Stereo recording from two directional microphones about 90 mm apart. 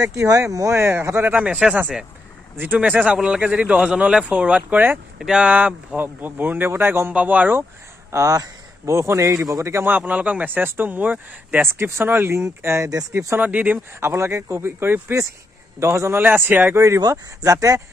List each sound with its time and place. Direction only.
0.1 s speech: 35° right (ahead or behind); by 1.6 s 15° right (ahead or behind)
2.6 s a man's voice: 20° right (ahead or behind)
8.1 s a man's voice: 40° right (ahead or behind)
13.4 s speech: 15° right (ahead or behind)
13.9 s a man's voice: 30° right (ahead or behind)